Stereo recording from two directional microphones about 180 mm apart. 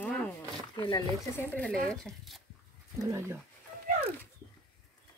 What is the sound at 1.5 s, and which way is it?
Speech, 5° left (ahead or behind).